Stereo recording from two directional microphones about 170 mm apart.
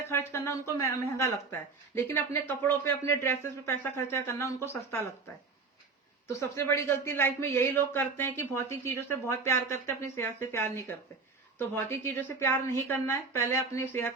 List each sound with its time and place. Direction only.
0.1 s a man's voice: 15° left (ahead or behind)
6.6 s a man's voice: 15° left (ahead or behind)